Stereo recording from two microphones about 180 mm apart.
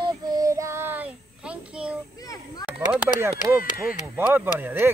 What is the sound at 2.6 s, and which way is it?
Speech, 10° right (ahead or behind).